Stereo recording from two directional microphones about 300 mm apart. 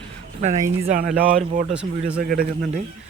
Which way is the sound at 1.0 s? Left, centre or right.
Centre.